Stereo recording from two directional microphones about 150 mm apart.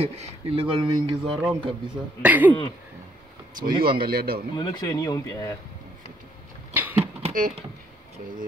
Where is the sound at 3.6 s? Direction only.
75° right (ahead or behind).